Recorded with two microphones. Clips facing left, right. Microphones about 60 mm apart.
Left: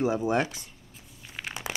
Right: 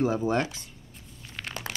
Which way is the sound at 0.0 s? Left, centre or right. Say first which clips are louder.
Even; centre.